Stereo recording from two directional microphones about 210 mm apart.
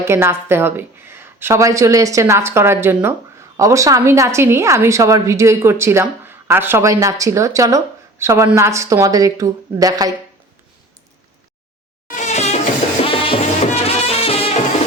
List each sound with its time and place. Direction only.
0.0 s a woman's voice: 10° right (ahead or behind)
12.1 s music: 35° left (ahead or behind)